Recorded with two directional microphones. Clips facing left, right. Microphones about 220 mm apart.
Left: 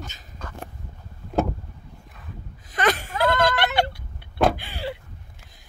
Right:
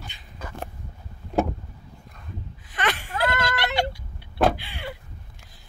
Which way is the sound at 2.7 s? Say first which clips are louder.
Left 5 dB; 40° left (ahead or behind).